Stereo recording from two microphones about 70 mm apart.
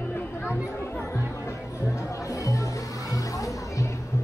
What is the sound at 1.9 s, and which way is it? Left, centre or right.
Music, left.